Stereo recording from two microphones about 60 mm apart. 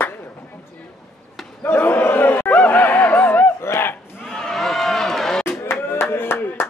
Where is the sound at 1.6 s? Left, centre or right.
Left.